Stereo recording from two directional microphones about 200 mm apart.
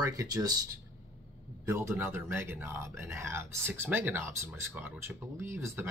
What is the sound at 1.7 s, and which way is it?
Speech, 10° right (ahead or behind).